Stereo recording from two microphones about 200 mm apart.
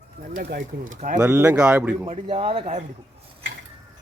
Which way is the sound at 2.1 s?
30° right (ahead or behind).